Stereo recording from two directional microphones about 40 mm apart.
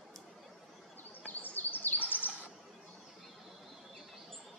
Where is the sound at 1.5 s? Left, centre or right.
Left.